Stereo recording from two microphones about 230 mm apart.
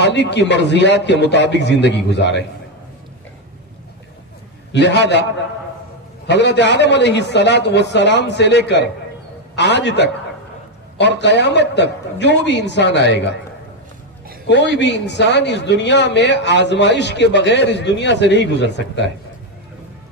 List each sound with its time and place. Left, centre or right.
0.0 s a man's voice: left
4.7 s a man's voice: left
6.2 s a man's voice: left
14.8 s a man's voice: left